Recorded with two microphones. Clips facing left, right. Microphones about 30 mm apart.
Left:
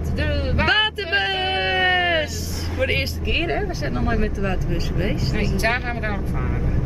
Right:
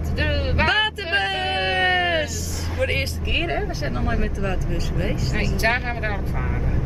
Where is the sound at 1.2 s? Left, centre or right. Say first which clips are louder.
Left 1 dB; centre.